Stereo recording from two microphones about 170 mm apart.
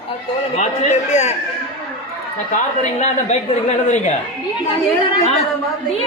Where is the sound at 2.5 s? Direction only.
45° left (ahead or behind).